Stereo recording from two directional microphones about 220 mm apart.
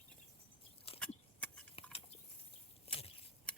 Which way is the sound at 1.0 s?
5° left (ahead or behind).